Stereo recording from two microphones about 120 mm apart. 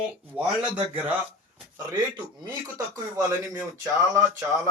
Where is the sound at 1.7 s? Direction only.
35° right (ahead or behind).